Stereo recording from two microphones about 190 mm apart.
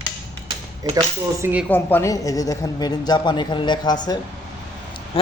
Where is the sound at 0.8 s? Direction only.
20° right (ahead or behind).